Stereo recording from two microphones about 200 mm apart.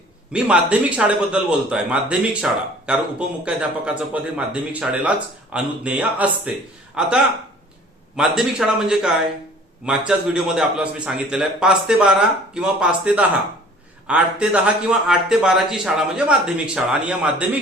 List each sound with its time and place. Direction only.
0.3 s a man's voice: 5° right (ahead or behind)
8.1 s a man's voice: centre (ahead or behind)